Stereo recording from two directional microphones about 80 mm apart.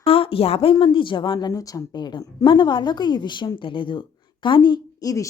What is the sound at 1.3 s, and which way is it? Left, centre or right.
Speech, left.